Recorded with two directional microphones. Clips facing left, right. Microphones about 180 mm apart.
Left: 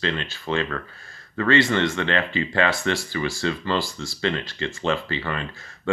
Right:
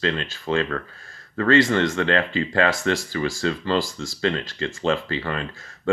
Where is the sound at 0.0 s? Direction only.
40° right (ahead or behind).